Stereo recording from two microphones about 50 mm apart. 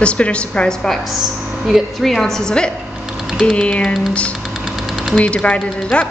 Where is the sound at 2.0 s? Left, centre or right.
Centre.